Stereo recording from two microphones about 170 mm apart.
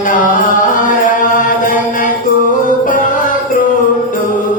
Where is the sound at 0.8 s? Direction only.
50° left (ahead or behind).